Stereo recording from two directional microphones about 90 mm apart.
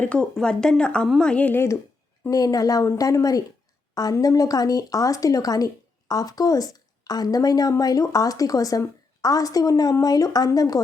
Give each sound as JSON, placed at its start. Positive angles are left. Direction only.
{"t": 0.0, "sound": "speech", "side_deg": 10}
{"t": 2.3, "sound": "a woman's voice", "side_deg": 40}